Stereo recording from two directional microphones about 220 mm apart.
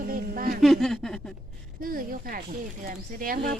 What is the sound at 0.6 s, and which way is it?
Speech, centre (ahead or behind).